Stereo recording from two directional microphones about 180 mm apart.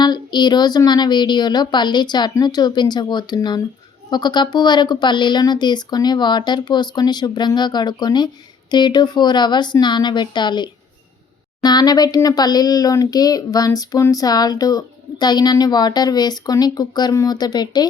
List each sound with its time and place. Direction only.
0.0 s a child's voice: 25° left (ahead or behind)